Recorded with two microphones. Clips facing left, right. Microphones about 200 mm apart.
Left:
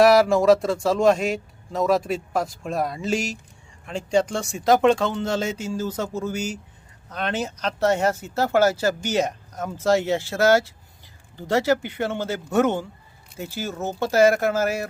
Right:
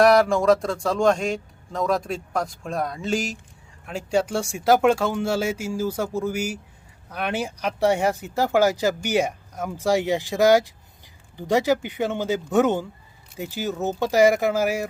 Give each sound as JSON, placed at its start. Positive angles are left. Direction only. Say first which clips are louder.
{"t": 0.0, "sound": "speech", "louder": "left 1 dB", "side_deg": 0}